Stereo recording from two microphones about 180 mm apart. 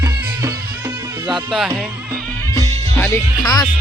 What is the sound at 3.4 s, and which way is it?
Speech, 20° left (ahead or behind).